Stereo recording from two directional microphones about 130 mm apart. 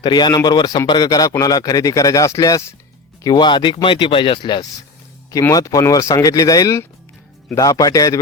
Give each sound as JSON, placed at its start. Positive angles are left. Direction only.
{"t": 0.0, "sound": "a man's voice", "side_deg": 35}
{"t": 5.3, "sound": "a man's voice", "side_deg": 25}